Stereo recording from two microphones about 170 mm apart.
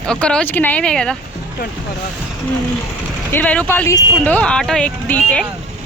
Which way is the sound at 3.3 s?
10° left (ahead or behind).